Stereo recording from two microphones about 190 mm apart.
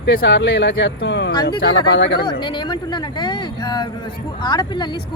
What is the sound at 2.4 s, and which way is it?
Speech, 25° left (ahead or behind).